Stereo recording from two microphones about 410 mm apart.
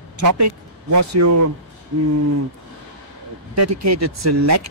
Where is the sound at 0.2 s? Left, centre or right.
Right.